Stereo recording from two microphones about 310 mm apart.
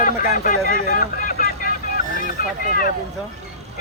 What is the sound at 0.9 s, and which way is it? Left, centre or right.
Vehicle, left.